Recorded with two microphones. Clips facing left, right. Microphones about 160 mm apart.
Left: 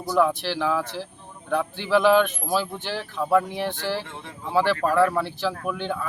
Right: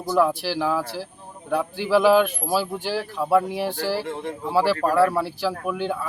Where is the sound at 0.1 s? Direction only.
5° right (ahead or behind).